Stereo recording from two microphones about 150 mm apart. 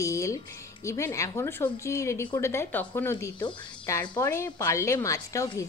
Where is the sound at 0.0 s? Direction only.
20° left (ahead or behind).